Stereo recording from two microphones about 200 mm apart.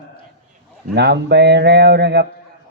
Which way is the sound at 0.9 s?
60° right (ahead or behind).